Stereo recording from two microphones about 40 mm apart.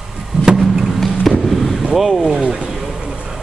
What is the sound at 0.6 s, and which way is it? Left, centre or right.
Vehicle, centre.